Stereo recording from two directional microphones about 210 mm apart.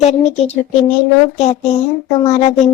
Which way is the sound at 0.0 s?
30° left (ahead or behind).